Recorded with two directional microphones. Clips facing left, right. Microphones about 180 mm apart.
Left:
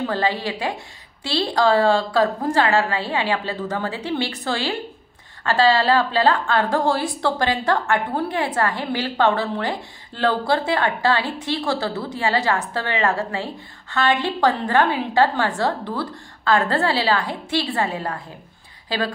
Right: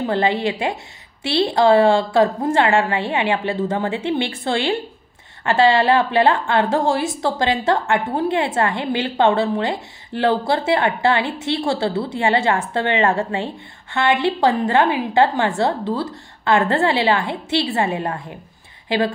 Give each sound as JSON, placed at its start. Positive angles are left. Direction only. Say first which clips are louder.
{"t": 0.0, "sound": "a woman's voice", "louder": "right 4 dB", "side_deg": -20}